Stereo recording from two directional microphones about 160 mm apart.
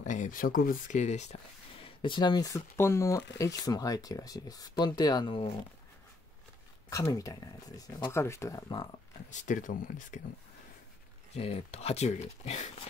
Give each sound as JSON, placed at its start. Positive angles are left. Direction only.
{"t": 0.0, "sound": "speech", "side_deg": 50}
{"t": 1.8, "sound": "speech", "side_deg": 30}
{"t": 6.9, "sound": "speech", "side_deg": 20}
{"t": 9.3, "sound": "speech", "side_deg": 50}
{"t": 11.3, "sound": "speech", "side_deg": 40}